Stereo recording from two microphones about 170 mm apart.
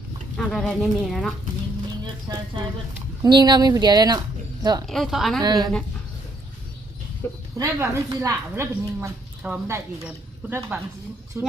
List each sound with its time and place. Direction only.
0.3 s speech: 5° left (ahead or behind)
2.3 s speech: 25° right (ahead or behind)
4.9 s speech: centre (ahead or behind)
5.4 s speech: 25° right (ahead or behind)
7.2 s speech: 15° left (ahead or behind)
7.6 s speech: 20° right (ahead or behind)